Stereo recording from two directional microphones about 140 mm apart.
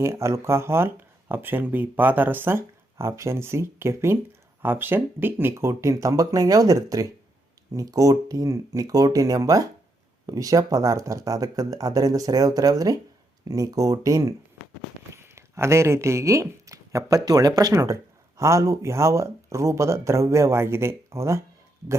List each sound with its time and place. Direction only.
0.0 s speech: 20° right (ahead or behind)